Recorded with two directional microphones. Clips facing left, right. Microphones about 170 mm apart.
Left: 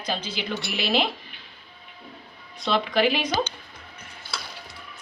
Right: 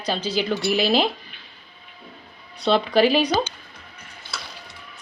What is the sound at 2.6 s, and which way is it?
Speech, 35° right (ahead or behind).